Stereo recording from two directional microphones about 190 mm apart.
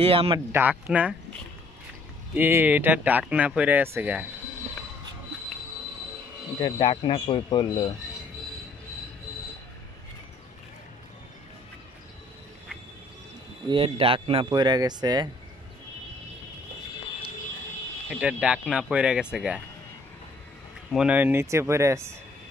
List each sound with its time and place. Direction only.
0.0 s speech: 30° right (ahead or behind)
0.5 s speech: 10° right (ahead or behind)
2.3 s speech: 10° right (ahead or behind)
6.6 s speech: 25° left (ahead or behind)
13.7 s speech: 30° right (ahead or behind)
18.1 s speech: 5° right (ahead or behind)
20.9 s speech: 5° right (ahead or behind)